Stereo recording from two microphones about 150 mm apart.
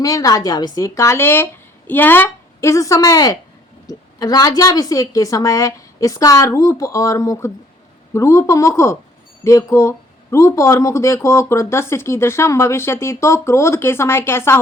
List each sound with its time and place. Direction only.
0.0 s a woman's voice: 25° left (ahead or behind)